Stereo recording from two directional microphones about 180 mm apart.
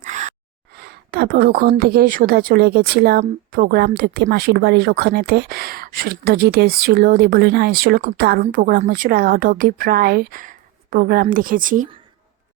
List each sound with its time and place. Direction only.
0.0 s gasp: 40° right (ahead or behind)
0.8 s a woman's voice: 65° right (ahead or behind); by 11.9 s 50° right (ahead or behind)